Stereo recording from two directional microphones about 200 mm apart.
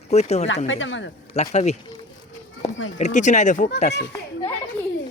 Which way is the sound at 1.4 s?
35° left (ahead or behind).